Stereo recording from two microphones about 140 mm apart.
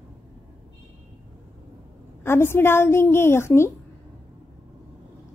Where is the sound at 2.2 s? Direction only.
15° left (ahead or behind).